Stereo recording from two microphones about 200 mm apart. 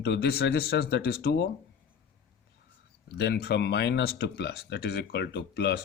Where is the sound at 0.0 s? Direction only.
55° left (ahead or behind).